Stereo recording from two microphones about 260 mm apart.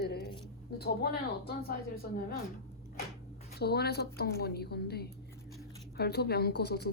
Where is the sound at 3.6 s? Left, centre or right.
Left.